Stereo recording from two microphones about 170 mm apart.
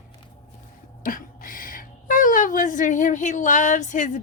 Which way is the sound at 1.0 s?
55° left (ahead or behind).